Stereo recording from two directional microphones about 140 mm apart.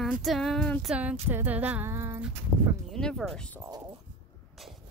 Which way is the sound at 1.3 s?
10° right (ahead or behind).